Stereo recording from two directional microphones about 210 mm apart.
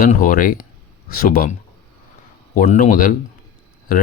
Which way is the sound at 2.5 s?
40° left (ahead or behind).